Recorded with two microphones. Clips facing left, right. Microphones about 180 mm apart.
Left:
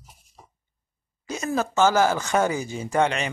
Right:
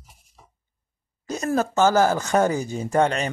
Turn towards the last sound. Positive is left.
turn(degrees=-40)  # may be behind; listen again after turning